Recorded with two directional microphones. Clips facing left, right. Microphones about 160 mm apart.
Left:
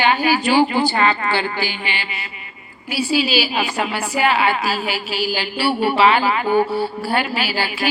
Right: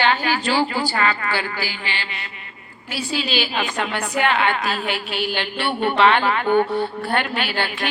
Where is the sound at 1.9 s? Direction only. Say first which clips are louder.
Left 2 dB; 10° left (ahead or behind).